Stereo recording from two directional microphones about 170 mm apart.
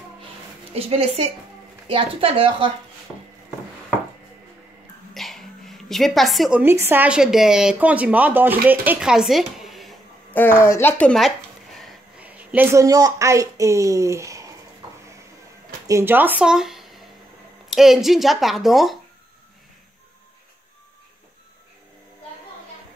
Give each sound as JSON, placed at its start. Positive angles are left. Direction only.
{"t": 0.7, "sound": "a woman's voice", "side_deg": -35}
{"t": 5.1, "sound": "a sound", "side_deg": 0}
{"t": 6.6, "sound": "a woman's voice", "side_deg": -15}
{"t": 10.3, "sound": "a sound", "side_deg": 15}
{"t": 12.3, "sound": "a woman's voice", "side_deg": -10}
{"t": 15.9, "sound": "speech", "side_deg": -15}